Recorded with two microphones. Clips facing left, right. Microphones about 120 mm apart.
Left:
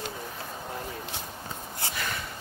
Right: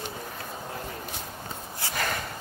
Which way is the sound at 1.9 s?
50° right (ahead or behind).